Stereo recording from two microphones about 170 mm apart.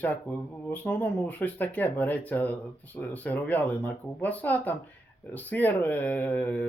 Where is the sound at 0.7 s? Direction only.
10° left (ahead or behind).